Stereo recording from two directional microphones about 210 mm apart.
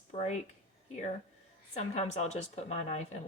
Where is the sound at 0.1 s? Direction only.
30° left (ahead or behind).